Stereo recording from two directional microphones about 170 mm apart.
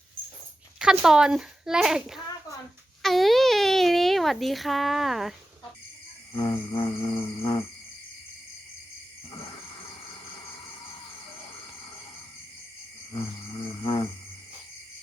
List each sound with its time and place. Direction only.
0.8 s a child's voice: 5° right (ahead or behind)
6.3 s mantra: 25° left (ahead or behind)
9.3 s a sound: 25° left (ahead or behind)
13.1 s mantra: 30° left (ahead or behind)